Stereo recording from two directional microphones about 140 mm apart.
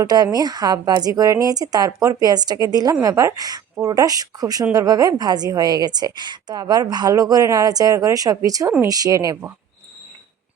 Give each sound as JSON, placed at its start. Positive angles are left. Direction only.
{"t": 0.0, "sound": "a woman's voice", "side_deg": -30}